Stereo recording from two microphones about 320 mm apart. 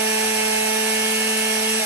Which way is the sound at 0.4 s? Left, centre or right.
Centre.